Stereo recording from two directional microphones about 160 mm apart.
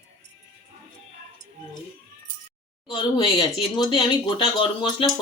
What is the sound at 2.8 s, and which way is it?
Speech, 30° left (ahead or behind).